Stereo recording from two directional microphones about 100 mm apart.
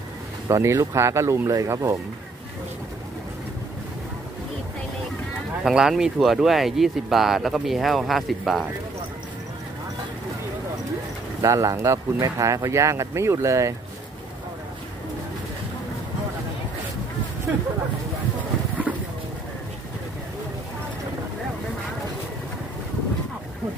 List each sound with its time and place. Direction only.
0.4 s speech: 30° right (ahead or behind)
5.6 s speech: 5° right (ahead or behind)
11.4 s speech: 30° right (ahead or behind)
18.9 s a sound: 5° right (ahead or behind)